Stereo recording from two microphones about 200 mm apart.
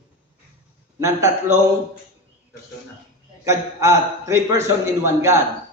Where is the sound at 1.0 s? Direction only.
15° right (ahead or behind).